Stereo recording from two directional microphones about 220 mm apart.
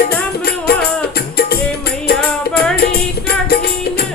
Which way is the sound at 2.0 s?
45° left (ahead or behind).